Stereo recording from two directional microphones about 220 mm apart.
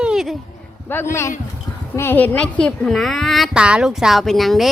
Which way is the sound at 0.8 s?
10° left (ahead or behind).